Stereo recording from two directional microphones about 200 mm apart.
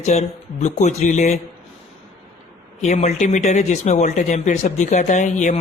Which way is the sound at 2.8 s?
35° left (ahead or behind).